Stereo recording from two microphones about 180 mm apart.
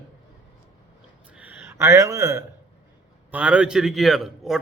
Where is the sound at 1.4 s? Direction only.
10° right (ahead or behind).